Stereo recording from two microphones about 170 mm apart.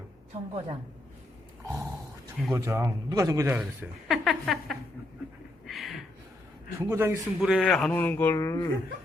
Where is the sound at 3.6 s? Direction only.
5° right (ahead or behind).